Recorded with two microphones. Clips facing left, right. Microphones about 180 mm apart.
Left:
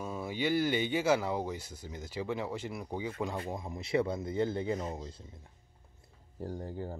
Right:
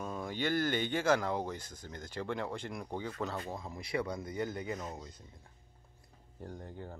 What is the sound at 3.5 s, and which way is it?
Speech, 20° left (ahead or behind).